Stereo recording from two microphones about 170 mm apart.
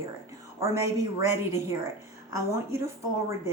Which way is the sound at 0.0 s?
15° right (ahead or behind).